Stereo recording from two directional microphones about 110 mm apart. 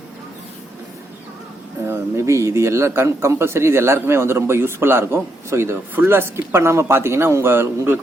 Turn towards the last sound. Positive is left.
turn(degrees=-20)  # may be behind; listen again after turning